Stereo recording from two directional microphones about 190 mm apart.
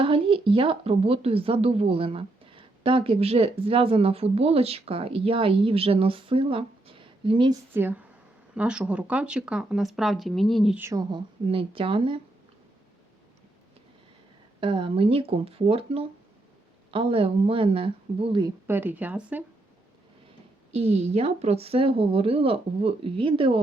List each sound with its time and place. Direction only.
0.0 s speech: 30° right (ahead or behind)
7.7 s speech: 10° right (ahead or behind)
10.8 s speech: 20° right (ahead or behind)
14.6 s speech: 25° right (ahead or behind)
18.7 s speech: 10° right (ahead or behind)
20.7 s speech: 35° right (ahead or behind)